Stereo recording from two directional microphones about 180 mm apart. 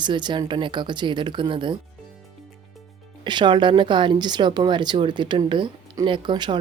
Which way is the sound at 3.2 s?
25° right (ahead or behind).